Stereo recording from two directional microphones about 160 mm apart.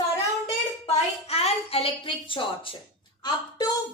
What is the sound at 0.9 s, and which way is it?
A woman's voice, 40° left (ahead or behind).